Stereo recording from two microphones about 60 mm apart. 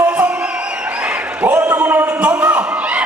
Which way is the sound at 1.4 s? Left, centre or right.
Right.